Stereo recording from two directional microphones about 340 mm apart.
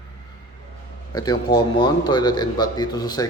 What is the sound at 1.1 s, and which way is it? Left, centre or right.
A man's voice, centre.